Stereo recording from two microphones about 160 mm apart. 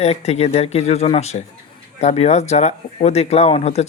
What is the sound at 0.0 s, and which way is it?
Speech, 40° left (ahead or behind).